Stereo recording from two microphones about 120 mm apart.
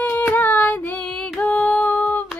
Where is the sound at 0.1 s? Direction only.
15° left (ahead or behind).